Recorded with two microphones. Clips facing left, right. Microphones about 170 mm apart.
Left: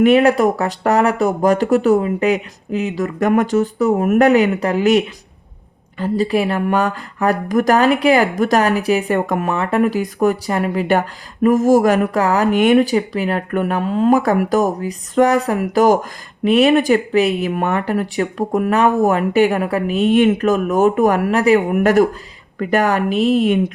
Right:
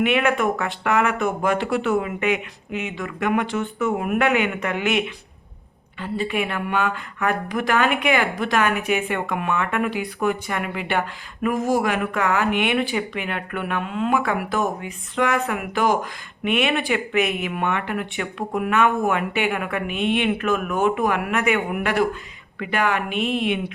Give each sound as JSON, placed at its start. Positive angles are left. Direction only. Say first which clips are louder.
{"t": 0.0, "sound": "speech", "louder": "left 8 dB", "side_deg": 40}